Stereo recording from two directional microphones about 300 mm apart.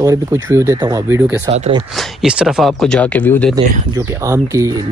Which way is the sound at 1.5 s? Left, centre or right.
Centre.